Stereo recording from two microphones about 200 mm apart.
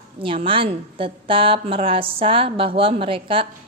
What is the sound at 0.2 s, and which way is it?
A woman's voice, 25° right (ahead or behind).